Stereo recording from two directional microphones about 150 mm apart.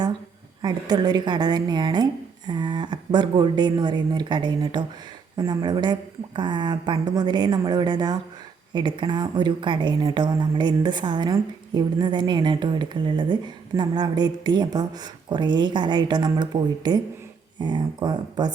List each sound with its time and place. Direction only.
0.6 s a woman's voice: 25° right (ahead or behind)